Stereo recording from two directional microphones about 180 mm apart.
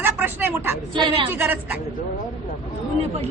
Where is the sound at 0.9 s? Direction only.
25° right (ahead or behind).